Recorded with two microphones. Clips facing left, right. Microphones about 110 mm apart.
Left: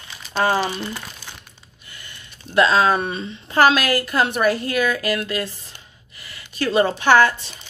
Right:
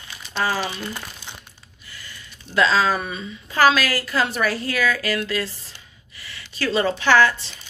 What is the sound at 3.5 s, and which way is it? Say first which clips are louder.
Speech: left 2 dB; 50° left (ahead or behind).